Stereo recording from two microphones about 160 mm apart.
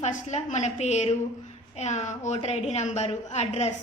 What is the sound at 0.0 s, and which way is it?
A woman's voice, 45° left (ahead or behind).